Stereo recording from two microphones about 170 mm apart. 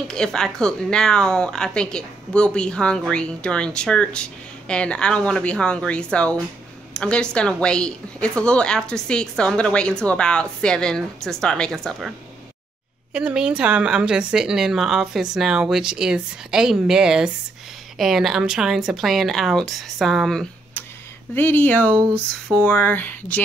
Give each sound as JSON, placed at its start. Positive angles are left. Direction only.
{"t": 0.1, "sound": "speech", "side_deg": 5}
{"t": 13.1, "sound": "speech", "side_deg": -5}
{"t": 21.4, "sound": "a sound", "side_deg": 10}